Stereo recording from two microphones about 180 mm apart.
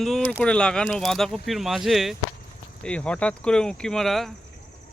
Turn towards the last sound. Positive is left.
turn(degrees=0)  # may be behind; listen again after turning